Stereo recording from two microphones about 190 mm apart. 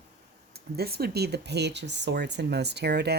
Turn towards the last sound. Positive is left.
turn(degrees=-60)  # may be behind; listen again after turning